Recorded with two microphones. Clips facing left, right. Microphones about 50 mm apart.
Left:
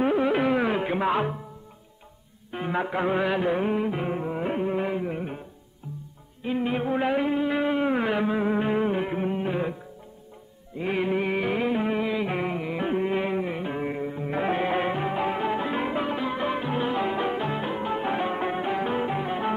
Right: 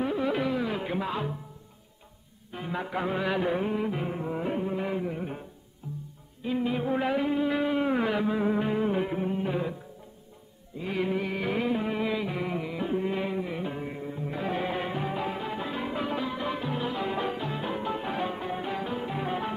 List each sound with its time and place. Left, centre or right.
0.0 s music: left
2.5 s music: left
6.4 s music: left
6.9 s music: centre
11.0 s music: left
12.0 s a sound: centre
12.3 s music: left
12.5 s carnatic music: left
13.0 s music: left
19.1 s music: centre